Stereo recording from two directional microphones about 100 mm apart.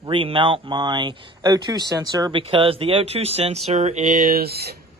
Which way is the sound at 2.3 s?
60° right (ahead or behind).